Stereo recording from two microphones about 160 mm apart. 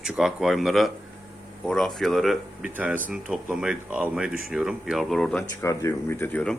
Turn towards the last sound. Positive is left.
turn(degrees=5)  # may be behind; listen again after turning